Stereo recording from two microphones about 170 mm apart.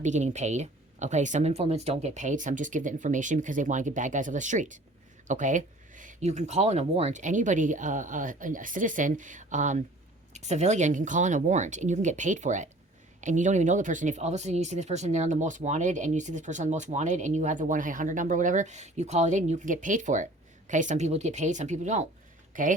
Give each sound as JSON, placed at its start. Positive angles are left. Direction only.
{"t": 0.0, "sound": "speech", "side_deg": -45}